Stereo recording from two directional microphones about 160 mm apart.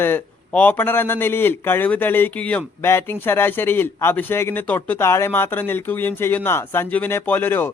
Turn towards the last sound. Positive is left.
turn(degrees=15)  # may be behind; listen again after turning